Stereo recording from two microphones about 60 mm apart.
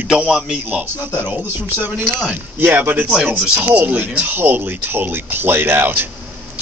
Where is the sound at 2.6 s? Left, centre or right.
Right.